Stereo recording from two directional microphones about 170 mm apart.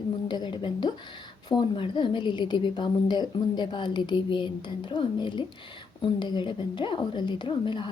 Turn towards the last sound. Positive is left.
turn(degrees=30)  # may be behind; listen again after turning